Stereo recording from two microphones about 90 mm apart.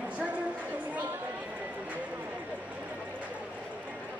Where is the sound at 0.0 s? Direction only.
15° right (ahead or behind).